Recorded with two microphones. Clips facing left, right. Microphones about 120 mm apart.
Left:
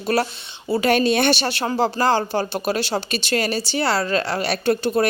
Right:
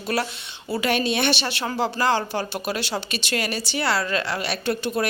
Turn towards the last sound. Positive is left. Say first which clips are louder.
# left 5 dB
turn(degrees=35)  # may be behind; listen again after turning